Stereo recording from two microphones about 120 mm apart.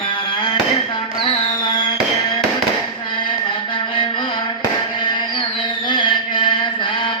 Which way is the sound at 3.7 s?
45° left (ahead or behind).